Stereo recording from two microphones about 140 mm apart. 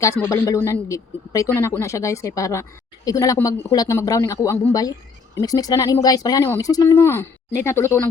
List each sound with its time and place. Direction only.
0.0 s speech: 20° left (ahead or behind)